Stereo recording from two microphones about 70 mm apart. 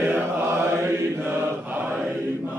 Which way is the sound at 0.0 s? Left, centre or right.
Right.